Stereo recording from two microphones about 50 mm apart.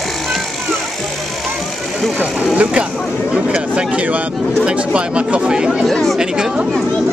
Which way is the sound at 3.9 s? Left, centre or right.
Right.